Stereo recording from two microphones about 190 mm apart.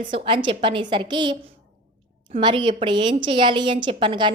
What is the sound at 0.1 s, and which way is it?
A woman's voice, 25° right (ahead or behind).